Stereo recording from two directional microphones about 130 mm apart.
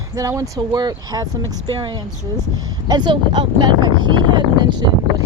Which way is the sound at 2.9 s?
35° right (ahead or behind).